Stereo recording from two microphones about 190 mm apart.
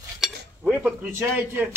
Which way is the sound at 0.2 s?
5° right (ahead or behind).